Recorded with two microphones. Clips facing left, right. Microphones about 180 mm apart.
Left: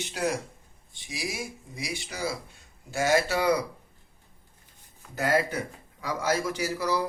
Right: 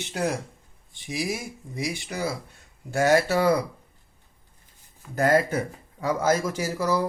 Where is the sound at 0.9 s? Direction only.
55° right (ahead or behind).